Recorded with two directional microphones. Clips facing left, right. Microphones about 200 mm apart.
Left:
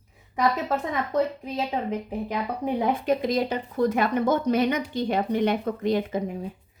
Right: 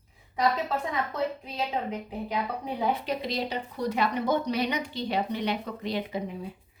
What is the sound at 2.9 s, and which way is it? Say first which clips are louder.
Speech: left 7 dB; 50° left (ahead or behind).